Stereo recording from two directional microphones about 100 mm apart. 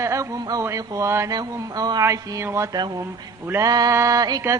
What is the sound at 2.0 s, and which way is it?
Speech, 30° right (ahead or behind).